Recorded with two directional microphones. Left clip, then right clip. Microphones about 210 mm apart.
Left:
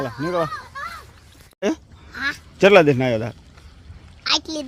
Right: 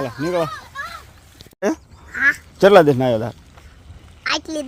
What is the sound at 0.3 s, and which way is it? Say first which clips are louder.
Speech: right 2 dB; 15° right (ahead or behind).